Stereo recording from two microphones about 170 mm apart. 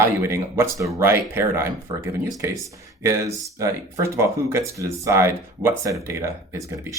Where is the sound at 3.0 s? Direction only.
15° right (ahead or behind).